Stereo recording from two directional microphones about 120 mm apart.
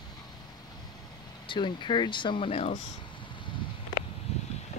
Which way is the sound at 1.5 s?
40° left (ahead or behind).